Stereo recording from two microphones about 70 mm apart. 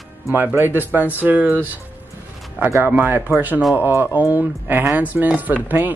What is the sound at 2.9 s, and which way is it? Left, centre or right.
Speech, right.